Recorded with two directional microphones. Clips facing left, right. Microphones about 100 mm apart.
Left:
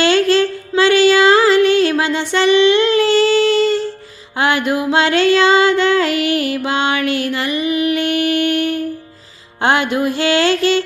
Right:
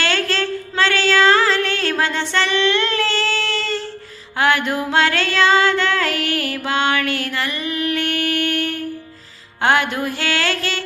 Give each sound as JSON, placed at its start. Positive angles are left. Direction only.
{"t": 0.0, "sound": "music", "side_deg": 20}